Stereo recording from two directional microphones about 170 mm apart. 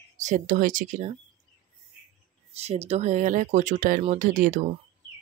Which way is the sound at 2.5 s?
40° right (ahead or behind).